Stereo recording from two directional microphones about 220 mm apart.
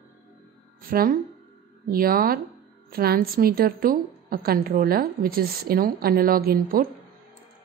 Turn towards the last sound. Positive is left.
turn(degrees=-45)  # may be behind; listen again after turning